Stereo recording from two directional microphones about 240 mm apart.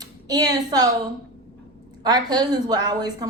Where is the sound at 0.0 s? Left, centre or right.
Centre.